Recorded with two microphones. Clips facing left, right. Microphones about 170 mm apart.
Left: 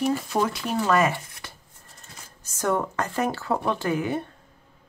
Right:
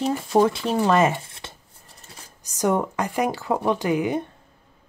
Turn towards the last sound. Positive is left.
turn(degrees=-15)  # may be behind; listen again after turning